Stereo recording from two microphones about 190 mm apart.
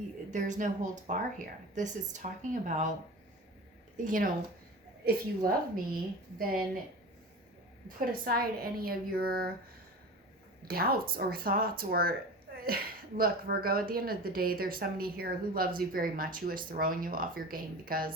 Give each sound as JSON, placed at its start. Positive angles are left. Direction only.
{"t": 0.3, "sound": "speech", "side_deg": -40}
{"t": 3.9, "sound": "speech", "side_deg": -45}
{"t": 5.5, "sound": "speech", "side_deg": -50}
{"t": 7.9, "sound": "speech", "side_deg": -50}
{"t": 10.7, "sound": "speech", "side_deg": -50}